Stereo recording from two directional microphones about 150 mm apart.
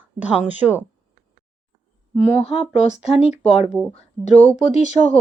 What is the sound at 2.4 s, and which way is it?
Speech, 40° left (ahead or behind).